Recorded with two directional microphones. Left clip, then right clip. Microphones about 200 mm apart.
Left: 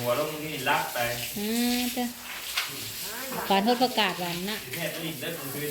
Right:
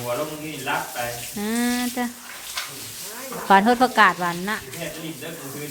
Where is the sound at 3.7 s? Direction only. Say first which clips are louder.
Right 8 dB; 30° right (ahead or behind).